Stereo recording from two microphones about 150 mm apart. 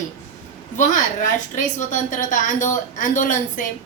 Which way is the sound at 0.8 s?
55° left (ahead or behind).